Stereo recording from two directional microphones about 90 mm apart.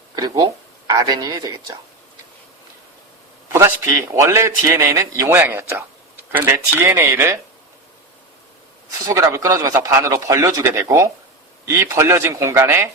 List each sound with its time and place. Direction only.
0.2 s speech: 45° right (ahead or behind)
3.5 s speech: 30° right (ahead or behind)
9.0 s speech: 35° right (ahead or behind)